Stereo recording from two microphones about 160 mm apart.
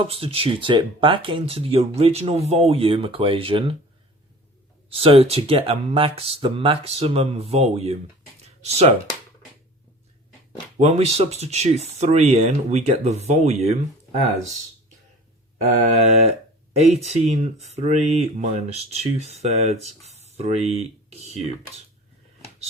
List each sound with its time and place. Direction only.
0.0 s speech: 35° right (ahead or behind)
4.9 s speech: 35° right (ahead or behind)
10.8 s speech: 40° right (ahead or behind)
15.9 s speech: 40° right (ahead or behind)